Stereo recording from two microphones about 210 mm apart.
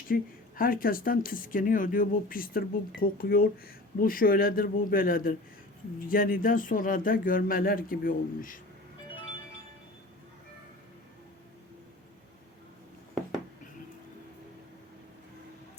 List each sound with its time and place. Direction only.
0.1 s speech: 40° left (ahead or behind)